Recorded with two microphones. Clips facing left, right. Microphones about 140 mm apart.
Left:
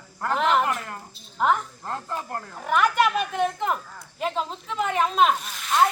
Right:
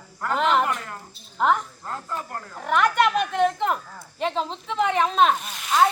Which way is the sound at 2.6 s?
5° left (ahead or behind).